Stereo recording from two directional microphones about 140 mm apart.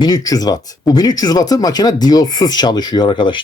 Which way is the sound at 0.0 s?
25° left (ahead or behind).